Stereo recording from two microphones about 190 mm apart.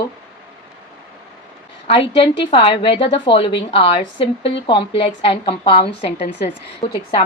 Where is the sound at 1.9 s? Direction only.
30° left (ahead or behind).